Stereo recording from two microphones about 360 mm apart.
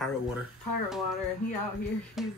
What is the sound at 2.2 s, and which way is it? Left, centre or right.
Speech, centre.